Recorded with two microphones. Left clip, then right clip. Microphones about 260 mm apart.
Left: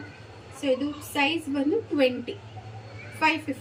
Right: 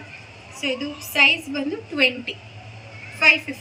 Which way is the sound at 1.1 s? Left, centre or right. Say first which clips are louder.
Right 9 dB; centre.